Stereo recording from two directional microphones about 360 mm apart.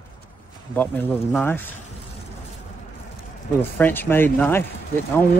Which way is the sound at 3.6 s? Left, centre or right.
Centre.